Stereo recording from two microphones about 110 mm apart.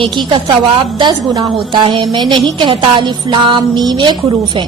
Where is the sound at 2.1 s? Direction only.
40° right (ahead or behind).